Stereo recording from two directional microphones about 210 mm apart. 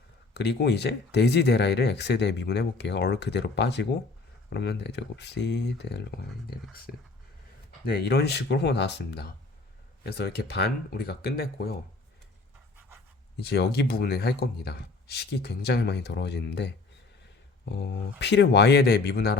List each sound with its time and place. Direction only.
0.3 s speech: 50° left (ahead or behind)
13.4 s speech: 50° left (ahead or behind)